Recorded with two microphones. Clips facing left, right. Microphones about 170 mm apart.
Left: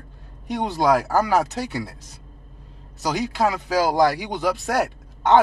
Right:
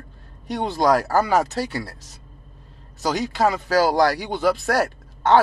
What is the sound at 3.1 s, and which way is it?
Speech, 10° left (ahead or behind).